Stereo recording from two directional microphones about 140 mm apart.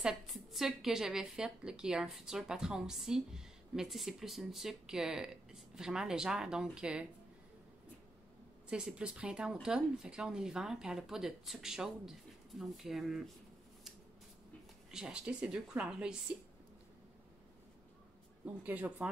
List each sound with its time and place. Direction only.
0.0 s a woman's voice: centre (ahead or behind)
8.6 s a woman's voice: 5° right (ahead or behind)
14.9 s a woman's voice: 5° right (ahead or behind)
18.4 s a woman's voice: 10° right (ahead or behind)